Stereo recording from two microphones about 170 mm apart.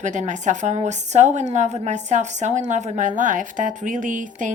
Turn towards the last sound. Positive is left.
turn(degrees=-50)  # may be behind; listen again after turning